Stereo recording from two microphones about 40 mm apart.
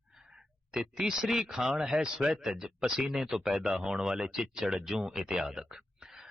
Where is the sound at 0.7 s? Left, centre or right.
Centre.